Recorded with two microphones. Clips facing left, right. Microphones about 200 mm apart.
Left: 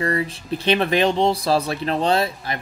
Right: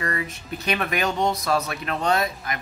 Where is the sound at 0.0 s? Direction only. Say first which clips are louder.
Left 6 dB; 30° left (ahead or behind).